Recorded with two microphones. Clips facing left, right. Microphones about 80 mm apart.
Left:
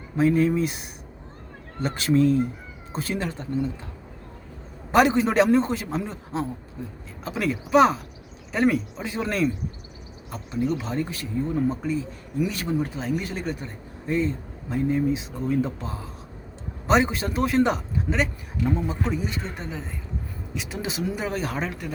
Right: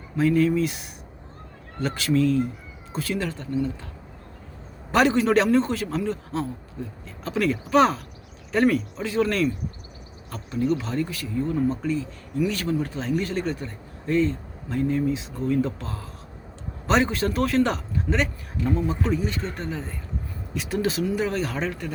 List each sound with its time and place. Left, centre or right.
0.2 s a man's voice: left
4.9 s a man's voice: centre